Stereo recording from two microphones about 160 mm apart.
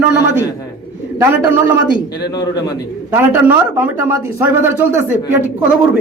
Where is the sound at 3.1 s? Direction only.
10° right (ahead or behind).